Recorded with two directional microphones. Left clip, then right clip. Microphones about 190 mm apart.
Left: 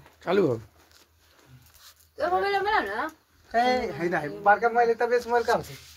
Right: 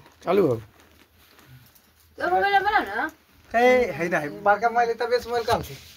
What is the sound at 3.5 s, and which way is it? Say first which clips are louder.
Speech: right 5 dB; 40° right (ahead or behind).